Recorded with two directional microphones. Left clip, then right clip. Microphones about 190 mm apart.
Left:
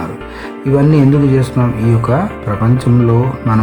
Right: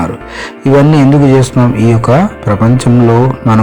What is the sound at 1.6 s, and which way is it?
Speech, 30° right (ahead or behind).